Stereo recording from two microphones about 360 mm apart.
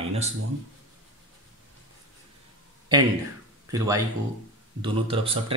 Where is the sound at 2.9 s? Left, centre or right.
Centre.